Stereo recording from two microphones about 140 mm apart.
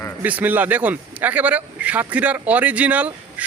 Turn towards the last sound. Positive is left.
turn(degrees=-10)  # may be behind; listen again after turning